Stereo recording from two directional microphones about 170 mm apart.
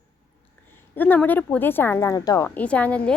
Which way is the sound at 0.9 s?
10° left (ahead or behind).